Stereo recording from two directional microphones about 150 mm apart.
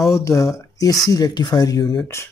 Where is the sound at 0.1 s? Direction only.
20° left (ahead or behind).